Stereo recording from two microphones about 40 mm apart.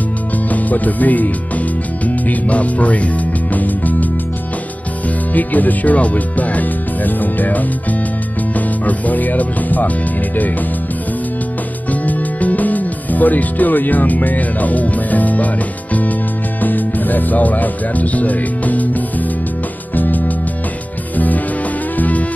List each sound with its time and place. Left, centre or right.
0.5 s speech: left
5.3 s speech: left
11.9 s music: left
16.6 s speech: left
21.9 s music: left